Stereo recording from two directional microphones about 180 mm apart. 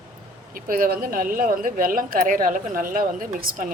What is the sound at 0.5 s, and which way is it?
Speech, 55° right (ahead or behind).